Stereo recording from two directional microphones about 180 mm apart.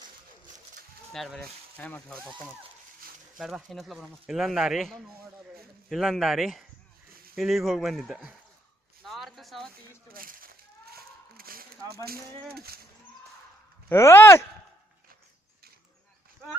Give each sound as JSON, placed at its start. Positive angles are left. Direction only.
{"t": 1.1, "sound": "speech", "side_deg": 0}
{"t": 3.3, "sound": "speech", "side_deg": 0}
{"t": 9.0, "sound": "a sound", "side_deg": 0}
{"t": 10.2, "sound": "a sound", "side_deg": -50}
{"t": 12.5, "sound": "speech", "side_deg": -60}
{"t": 13.9, "sound": "speech", "side_deg": 15}